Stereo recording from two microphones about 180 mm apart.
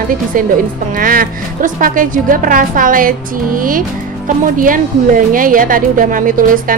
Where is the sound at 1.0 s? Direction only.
50° right (ahead or behind).